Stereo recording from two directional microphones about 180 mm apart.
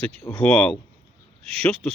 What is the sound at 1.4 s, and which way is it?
Speech, 35° right (ahead or behind).